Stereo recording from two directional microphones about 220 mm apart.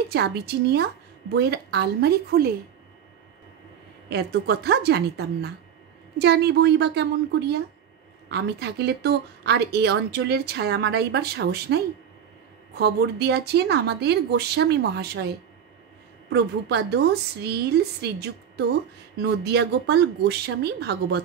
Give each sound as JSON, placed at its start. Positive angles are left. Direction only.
{"t": 0.1, "sound": "speech", "side_deg": -50}
{"t": 4.1, "sound": "speech", "side_deg": -50}
{"t": 19.2, "sound": "speech", "side_deg": -50}